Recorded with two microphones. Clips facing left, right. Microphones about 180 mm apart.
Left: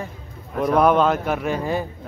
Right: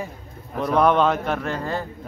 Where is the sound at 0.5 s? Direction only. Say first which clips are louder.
Left 2 dB; 5° left (ahead or behind).